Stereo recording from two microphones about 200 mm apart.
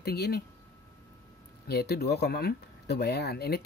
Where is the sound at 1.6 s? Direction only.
55° left (ahead or behind).